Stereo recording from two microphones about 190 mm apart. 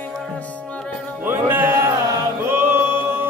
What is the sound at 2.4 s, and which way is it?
Choir, 10° right (ahead or behind).